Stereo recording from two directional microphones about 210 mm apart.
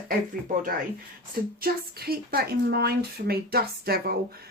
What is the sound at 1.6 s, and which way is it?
A woman's voice, 45° right (ahead or behind).